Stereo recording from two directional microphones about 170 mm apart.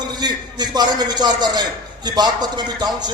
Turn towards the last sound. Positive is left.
turn(degrees=-25)  # may be behind; listen again after turning